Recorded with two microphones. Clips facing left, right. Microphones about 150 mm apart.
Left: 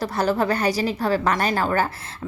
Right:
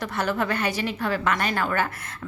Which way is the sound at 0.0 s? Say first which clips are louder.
Left 4 dB; 35° left (ahead or behind).